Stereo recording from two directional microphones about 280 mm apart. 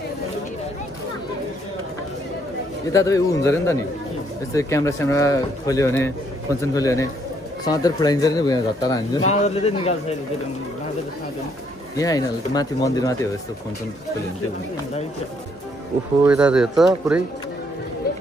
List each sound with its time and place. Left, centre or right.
2.9 s a man's voice: centre
12.0 s a man's voice: centre
16.3 s speech: centre